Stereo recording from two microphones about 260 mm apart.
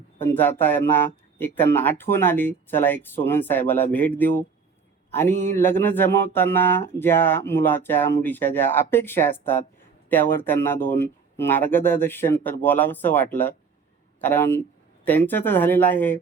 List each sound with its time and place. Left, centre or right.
0.2 s speech: centre